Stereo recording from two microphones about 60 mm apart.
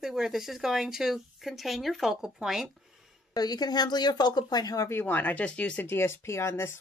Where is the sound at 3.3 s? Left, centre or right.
Left.